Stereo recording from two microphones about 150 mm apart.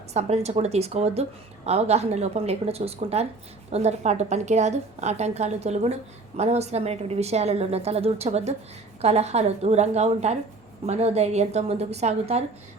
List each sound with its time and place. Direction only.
0.1 s a woman's voice: 45° right (ahead or behind)